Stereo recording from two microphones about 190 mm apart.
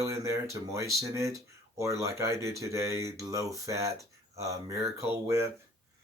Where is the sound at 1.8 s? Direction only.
15° right (ahead or behind).